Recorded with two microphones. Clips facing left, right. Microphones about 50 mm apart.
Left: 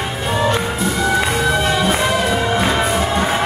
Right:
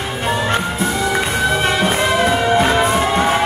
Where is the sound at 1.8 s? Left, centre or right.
Right.